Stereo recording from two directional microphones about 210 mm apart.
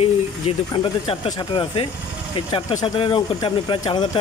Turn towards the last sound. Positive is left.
turn(degrees=20)  # may be behind; listen again after turning